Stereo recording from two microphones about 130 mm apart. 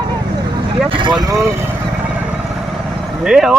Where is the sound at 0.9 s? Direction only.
35° right (ahead or behind).